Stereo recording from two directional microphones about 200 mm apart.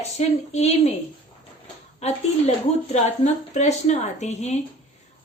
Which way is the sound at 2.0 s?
35° left (ahead or behind).